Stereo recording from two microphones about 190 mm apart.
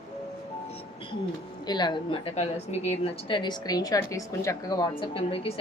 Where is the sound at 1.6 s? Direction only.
20° left (ahead or behind).